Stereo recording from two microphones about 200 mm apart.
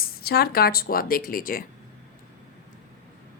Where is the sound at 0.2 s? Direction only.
50° left (ahead or behind).